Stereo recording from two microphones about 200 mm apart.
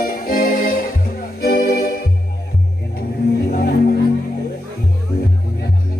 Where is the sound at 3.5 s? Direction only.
50° left (ahead or behind).